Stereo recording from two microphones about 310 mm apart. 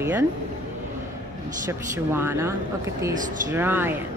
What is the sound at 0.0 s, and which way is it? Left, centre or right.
Speech, centre.